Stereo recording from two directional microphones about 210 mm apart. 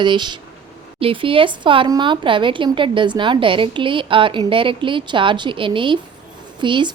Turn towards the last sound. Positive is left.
turn(degrees=-20)  # may be behind; listen again after turning